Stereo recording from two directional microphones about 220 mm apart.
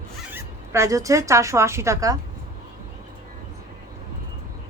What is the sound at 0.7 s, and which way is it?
A woman's voice, 15° right (ahead or behind).